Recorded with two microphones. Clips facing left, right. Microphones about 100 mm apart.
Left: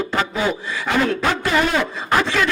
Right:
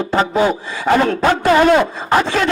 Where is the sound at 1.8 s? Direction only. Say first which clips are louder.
Right 4 dB; 30° right (ahead or behind).